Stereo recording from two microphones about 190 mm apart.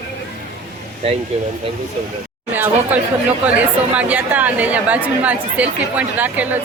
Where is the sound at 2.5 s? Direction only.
10° right (ahead or behind).